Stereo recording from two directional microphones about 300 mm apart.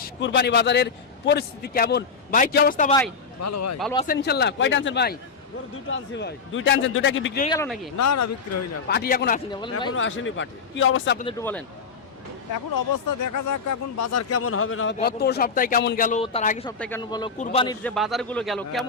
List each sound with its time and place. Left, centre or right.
0.0 s a man's voice: left
3.4 s speech: left
3.9 s a man's voice: left
7.4 s speech: centre
7.9 s speech: left
8.9 s a man's voice: left
9.5 s speech: centre
9.9 s a man's voice: left
11.3 s speech: centre
12.9 s speech: left
14.9 s speech: left
16.6 s a man's voice: centre
17.8 s a man's voice: centre